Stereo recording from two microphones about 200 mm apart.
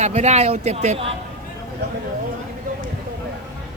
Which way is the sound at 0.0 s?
35° right (ahead or behind).